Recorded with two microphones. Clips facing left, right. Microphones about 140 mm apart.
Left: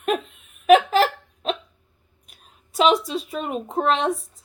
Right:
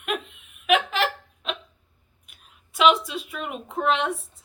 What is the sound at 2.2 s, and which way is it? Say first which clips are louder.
Speech: left 3 dB; 40° left (ahead or behind).